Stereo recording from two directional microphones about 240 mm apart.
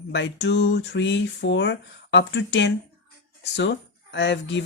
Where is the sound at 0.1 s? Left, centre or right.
Left.